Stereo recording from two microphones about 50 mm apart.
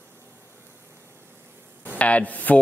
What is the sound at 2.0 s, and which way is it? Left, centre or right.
Speech, left.